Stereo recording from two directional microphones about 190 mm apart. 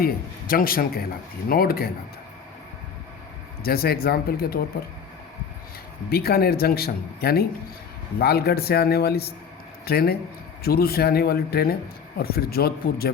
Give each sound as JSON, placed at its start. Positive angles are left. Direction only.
{"t": 0.0, "sound": "a man's voice", "side_deg": 50}
{"t": 3.6, "sound": "a man's voice", "side_deg": 50}
{"t": 6.1, "sound": "a man's voice", "side_deg": 55}